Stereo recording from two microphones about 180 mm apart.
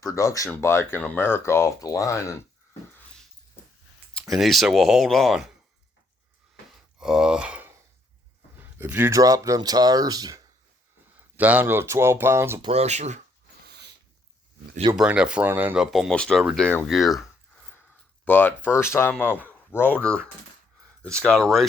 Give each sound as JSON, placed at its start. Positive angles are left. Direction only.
{"t": 0.0, "sound": "speech", "side_deg": 20}
{"t": 4.1, "sound": "speech", "side_deg": 0}
{"t": 7.0, "sound": "speech", "side_deg": -5}
{"t": 11.3, "sound": "speech", "side_deg": -10}
{"t": 12.6, "sound": "speech", "side_deg": -35}
{"t": 13.7, "sound": "a sound", "side_deg": -70}
{"t": 14.9, "sound": "speech", "side_deg": -5}
{"t": 18.3, "sound": "speech", "side_deg": 10}